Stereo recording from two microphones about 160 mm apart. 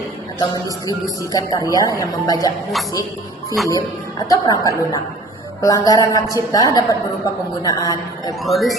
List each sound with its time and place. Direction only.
0.3 s speech: 25° left (ahead or behind)
3.6 s speech: centre (ahead or behind)
4.3 s speech: 20° left (ahead or behind)
8.4 s speech: centre (ahead or behind)